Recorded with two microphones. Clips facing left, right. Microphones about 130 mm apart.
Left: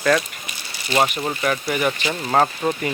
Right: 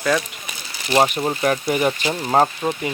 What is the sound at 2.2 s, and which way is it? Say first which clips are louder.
Speech: right 1 dB; 20° right (ahead or behind).